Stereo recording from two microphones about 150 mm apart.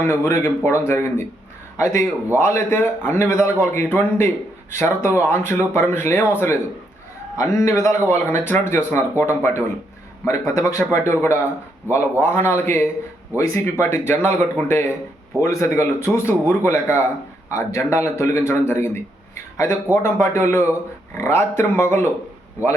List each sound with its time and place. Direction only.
0.0 s a man's voice: 20° left (ahead or behind)